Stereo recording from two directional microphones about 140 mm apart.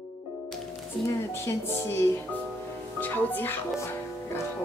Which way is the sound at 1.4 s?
20° left (ahead or behind).